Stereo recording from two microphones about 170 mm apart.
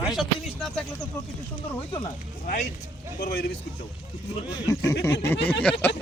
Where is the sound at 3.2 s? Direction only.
70° left (ahead or behind).